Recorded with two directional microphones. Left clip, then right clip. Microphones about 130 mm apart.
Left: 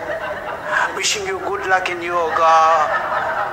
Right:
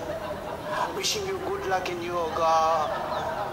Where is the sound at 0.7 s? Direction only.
20° left (ahead or behind).